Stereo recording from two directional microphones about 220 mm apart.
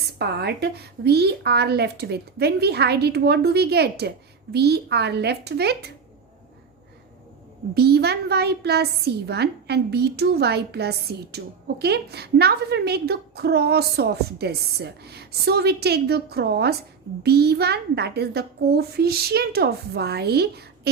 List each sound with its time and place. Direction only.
0.2 s a woman's voice: 50° right (ahead or behind)
7.7 s a woman's voice: 45° right (ahead or behind)